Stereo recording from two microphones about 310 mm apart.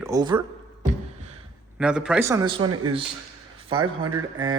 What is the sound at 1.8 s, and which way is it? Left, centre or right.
Speech, centre.